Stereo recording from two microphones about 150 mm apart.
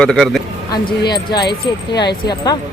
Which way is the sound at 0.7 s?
30° left (ahead or behind).